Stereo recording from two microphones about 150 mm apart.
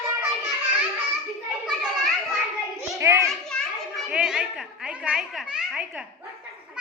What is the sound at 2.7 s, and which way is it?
Hands, 20° right (ahead or behind).